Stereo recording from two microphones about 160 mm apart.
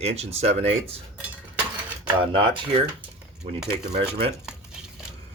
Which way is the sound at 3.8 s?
35° right (ahead or behind).